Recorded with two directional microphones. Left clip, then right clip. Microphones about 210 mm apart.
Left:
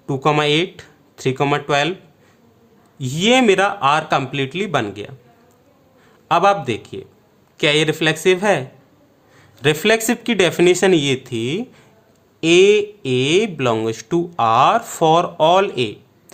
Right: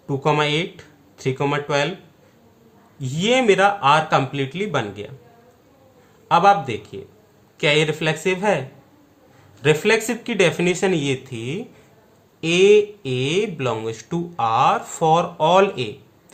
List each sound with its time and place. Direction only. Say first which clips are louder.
0.0 s speech: left 3 dB; 50° left (ahead or behind)
3.0 s speech: left 4 dB; 50° left (ahead or behind)
6.2 s speech: even; 50° left (ahead or behind)